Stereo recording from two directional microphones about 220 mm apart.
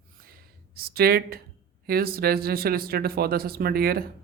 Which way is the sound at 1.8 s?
45° right (ahead or behind).